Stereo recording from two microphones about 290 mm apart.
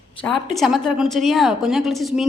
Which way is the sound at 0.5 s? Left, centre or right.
Centre.